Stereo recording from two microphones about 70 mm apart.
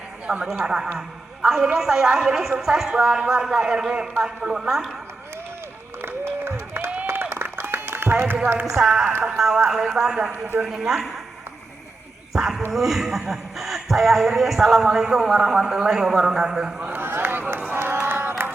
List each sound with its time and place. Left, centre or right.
0.4 s a woman's voice: centre
6.0 s applause: right
7.1 s a sound: right
8.7 s a woman's voice: centre
9.2 s a sound: centre
9.6 s a woman's voice: centre
12.3 s a sound: centre
12.7 s speech: centre
16.8 s run: right
18.0 s music: right